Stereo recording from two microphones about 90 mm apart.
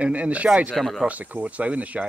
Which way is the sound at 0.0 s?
15° right (ahead or behind).